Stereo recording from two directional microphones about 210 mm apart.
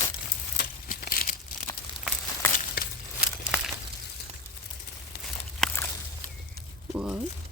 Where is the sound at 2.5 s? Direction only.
40° left (ahead or behind).